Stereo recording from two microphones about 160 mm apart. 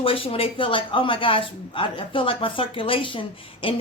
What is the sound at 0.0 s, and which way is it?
Speech, 35° left (ahead or behind).